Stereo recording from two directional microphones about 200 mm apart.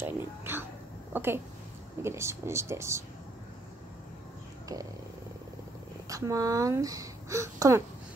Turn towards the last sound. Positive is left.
turn(degrees=-15)  # may be behind; listen again after turning